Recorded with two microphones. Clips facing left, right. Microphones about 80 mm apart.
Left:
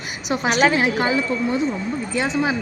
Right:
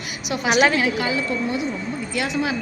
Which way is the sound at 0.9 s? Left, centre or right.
Left.